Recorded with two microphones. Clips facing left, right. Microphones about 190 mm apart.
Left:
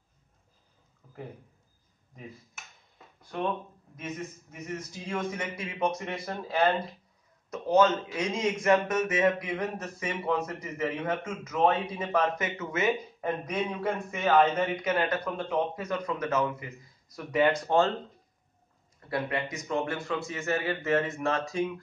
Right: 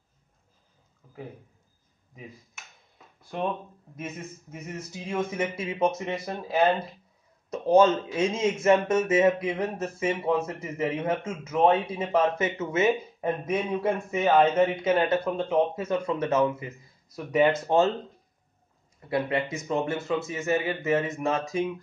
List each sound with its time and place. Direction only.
1.0 s a sound: 5° right (ahead or behind)
4.0 s speech: 25° right (ahead or behind)
18.9 s a man's voice: 20° right (ahead or behind)